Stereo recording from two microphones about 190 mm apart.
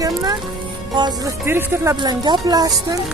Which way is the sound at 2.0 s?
20° right (ahead or behind).